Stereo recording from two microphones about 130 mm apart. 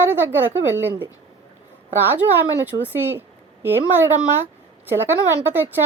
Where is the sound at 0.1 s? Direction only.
15° right (ahead or behind).